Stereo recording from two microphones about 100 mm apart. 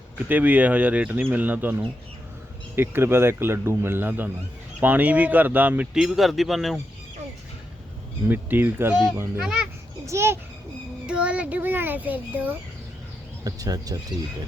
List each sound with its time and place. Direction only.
0.3 s a man's voice: 15° right (ahead or behind)
5.9 s speech: 5° right (ahead or behind)
8.3 s a man's voice: 20° right (ahead or behind)
9.4 s speech: 10° right (ahead or behind)
10.1 s a child's voice: 25° right (ahead or behind)
11.0 s speech: 10° right (ahead or behind)
13.4 s speech: 40° right (ahead or behind)